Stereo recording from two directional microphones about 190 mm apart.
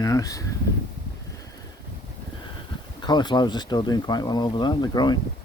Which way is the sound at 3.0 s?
20° left (ahead or behind).